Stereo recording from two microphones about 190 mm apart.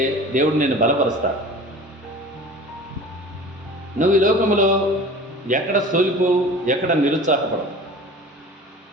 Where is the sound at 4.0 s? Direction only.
45° right (ahead or behind).